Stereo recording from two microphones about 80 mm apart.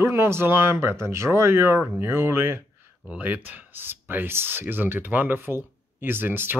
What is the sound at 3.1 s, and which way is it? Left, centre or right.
Speech, centre.